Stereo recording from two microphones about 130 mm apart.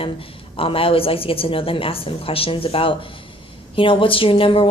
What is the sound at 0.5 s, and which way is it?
A woman's voice, 45° left (ahead or behind).